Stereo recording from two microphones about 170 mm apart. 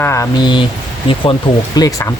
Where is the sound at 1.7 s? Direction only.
20° left (ahead or behind).